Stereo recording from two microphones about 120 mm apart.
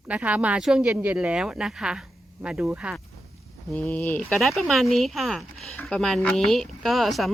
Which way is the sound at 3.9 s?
20° left (ahead or behind).